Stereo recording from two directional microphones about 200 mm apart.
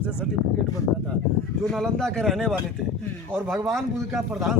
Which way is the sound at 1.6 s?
Centre (ahead or behind).